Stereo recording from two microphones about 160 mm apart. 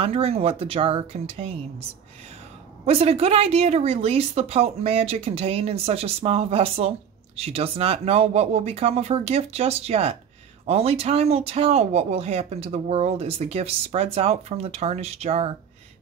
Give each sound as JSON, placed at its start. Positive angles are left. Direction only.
{"t": 0.0, "sound": "speech", "side_deg": -35}
{"t": 2.8, "sound": "speech", "side_deg": -40}